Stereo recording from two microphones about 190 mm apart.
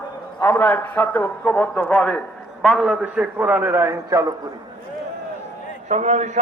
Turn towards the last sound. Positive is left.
turn(degrees=-40)  # may be behind; listen again after turning